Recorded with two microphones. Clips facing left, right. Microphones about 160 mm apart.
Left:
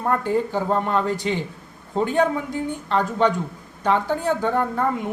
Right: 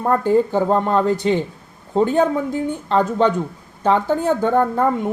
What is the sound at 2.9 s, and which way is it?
Speech, 35° right (ahead or behind).